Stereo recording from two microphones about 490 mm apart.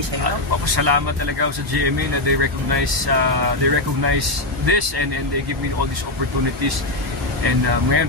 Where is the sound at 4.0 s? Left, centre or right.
Right.